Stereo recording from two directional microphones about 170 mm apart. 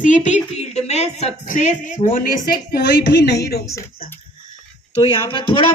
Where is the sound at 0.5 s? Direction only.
40° left (ahead or behind).